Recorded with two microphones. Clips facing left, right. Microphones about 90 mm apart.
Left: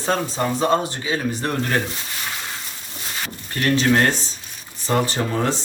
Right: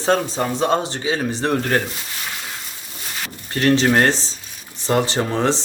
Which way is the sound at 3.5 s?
25° right (ahead or behind).